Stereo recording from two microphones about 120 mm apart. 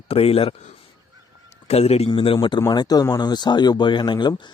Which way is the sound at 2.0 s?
50° left (ahead or behind).